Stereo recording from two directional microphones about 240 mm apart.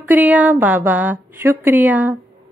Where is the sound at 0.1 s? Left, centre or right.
Centre.